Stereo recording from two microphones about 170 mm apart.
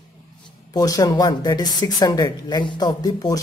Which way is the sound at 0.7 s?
20° left (ahead or behind).